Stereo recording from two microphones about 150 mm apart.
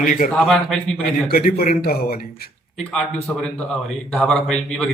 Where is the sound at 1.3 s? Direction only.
85° left.